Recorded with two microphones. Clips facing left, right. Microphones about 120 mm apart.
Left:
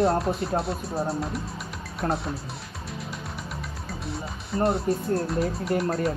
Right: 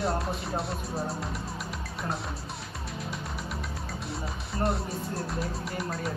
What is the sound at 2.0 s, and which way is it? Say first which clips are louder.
Speech: left 8 dB; 55° left (ahead or behind).